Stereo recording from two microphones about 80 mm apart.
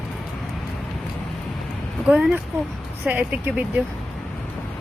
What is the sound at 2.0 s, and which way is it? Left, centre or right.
Speech, centre.